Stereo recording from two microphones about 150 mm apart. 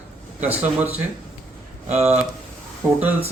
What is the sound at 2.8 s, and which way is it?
Speech, 15° right (ahead or behind).